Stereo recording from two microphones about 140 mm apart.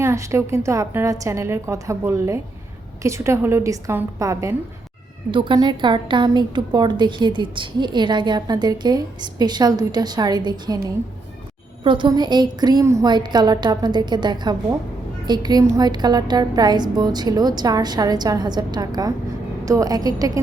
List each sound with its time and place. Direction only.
0.0 s speech: 20° right (ahead or behind)
5.3 s a woman's voice: 35° right (ahead or behind)
11.8 s a woman's voice: 35° right (ahead or behind)